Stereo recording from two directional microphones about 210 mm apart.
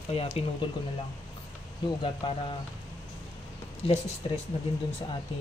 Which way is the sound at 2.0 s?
25° left (ahead or behind).